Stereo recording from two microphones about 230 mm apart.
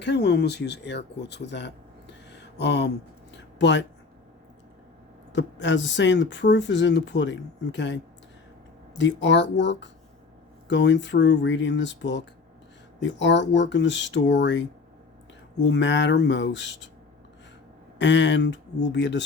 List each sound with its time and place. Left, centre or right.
0.0 s speech: left
2.3 s a sound: left
5.3 s speech: left
15.6 s speech: left
18.0 s speech: left